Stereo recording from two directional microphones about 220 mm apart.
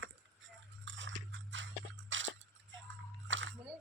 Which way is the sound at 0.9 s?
55° right (ahead or behind).